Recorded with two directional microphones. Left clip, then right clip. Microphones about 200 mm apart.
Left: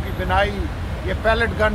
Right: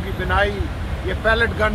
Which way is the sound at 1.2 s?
60° left (ahead or behind).